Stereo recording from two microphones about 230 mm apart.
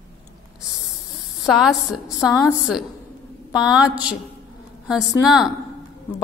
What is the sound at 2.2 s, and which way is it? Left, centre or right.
Speech, centre.